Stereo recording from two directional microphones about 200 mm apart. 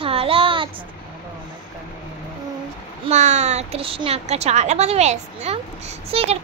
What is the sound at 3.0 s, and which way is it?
A child's voice, 35° right (ahead or behind).